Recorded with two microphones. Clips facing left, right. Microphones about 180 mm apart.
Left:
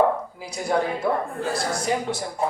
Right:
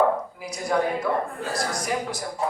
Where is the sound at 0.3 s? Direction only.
30° left (ahead or behind).